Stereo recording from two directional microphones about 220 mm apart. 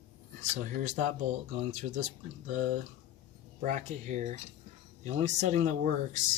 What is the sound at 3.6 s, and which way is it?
Speech, 35° right (ahead or behind).